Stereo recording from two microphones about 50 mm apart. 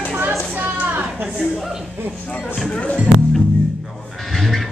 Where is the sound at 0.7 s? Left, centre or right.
Right.